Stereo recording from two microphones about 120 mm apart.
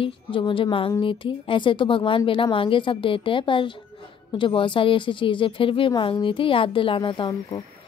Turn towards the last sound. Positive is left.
turn(degrees=40)  # may be behind; listen again after turning